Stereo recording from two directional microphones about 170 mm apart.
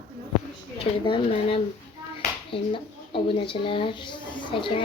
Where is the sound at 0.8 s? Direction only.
30° left (ahead or behind).